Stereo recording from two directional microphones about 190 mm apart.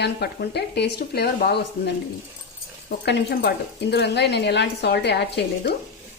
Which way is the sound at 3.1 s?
55° left (ahead or behind).